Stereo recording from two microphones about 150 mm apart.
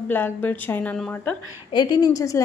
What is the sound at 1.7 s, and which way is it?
Speech, 25° left (ahead or behind).